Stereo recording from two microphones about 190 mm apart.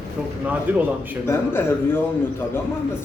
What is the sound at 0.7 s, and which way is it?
Speech, 10° right (ahead or behind).